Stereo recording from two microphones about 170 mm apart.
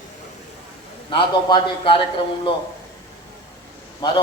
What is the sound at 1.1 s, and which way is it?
Speech, 30° left (ahead or behind).